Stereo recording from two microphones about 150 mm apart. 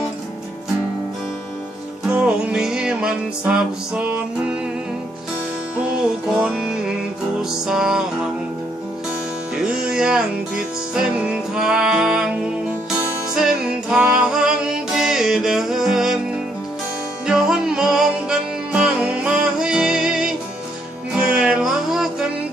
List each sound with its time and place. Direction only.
2.0 s music: 5° right (ahead or behind)
5.7 s music: 10° right (ahead or behind)
9.6 s music: 5° right (ahead or behind)
13.3 s music: 5° right (ahead or behind)
17.2 s music: 5° right (ahead or behind)